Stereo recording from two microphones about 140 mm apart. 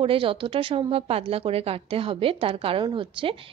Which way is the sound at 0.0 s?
40° right (ahead or behind).